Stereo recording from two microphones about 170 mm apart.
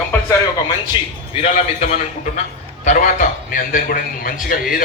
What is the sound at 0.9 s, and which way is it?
Speech, 30° left (ahead or behind).